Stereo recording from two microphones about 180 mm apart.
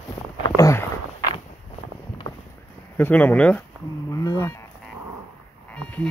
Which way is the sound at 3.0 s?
10° left (ahead or behind).